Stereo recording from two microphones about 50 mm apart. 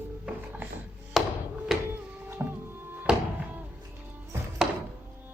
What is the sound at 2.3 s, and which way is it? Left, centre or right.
Music, right.